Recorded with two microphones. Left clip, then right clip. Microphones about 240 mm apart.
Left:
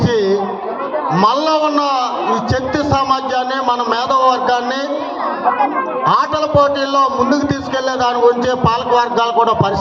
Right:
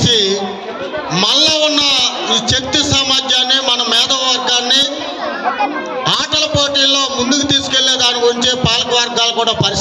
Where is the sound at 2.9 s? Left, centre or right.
Right.